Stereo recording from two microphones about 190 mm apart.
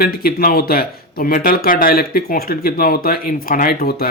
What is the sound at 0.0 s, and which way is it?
Speech, 55° left (ahead or behind).